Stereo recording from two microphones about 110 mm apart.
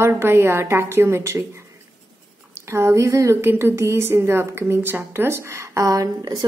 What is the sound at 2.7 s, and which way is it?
A woman's voice, 25° right (ahead or behind).